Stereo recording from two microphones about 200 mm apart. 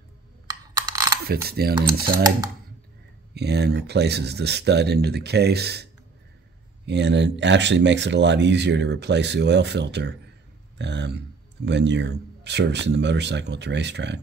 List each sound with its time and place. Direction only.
0.5 s coin: 15° right (ahead or behind)
1.2 s mechanisms: 50° right (ahead or behind)
3.3 s speech: 55° right (ahead or behind)
6.9 s speech: 60° right (ahead or behind)